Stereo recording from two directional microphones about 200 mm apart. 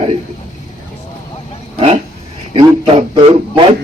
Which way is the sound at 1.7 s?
30° right (ahead or behind).